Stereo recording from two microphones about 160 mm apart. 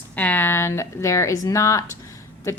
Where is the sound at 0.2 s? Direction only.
10° left (ahead or behind).